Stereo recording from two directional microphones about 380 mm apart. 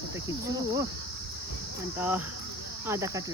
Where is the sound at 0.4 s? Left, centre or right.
Centre.